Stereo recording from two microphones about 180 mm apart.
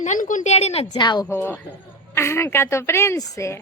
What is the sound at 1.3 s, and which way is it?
A woman's voice, 10° left (ahead or behind).